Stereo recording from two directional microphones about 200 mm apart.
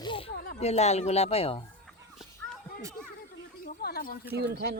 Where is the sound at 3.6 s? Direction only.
50° left (ahead or behind).